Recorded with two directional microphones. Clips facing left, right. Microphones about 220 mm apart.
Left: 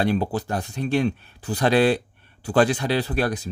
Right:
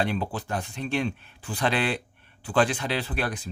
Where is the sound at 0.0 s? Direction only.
40° left (ahead or behind).